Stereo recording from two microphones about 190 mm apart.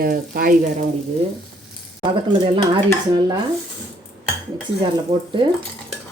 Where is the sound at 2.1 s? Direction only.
25° right (ahead or behind).